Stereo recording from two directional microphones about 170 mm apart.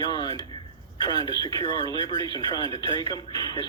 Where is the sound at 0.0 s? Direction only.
25° left (ahead or behind).